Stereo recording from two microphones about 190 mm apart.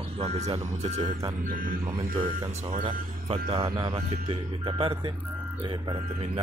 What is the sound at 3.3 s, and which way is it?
Speech, 25° right (ahead or behind).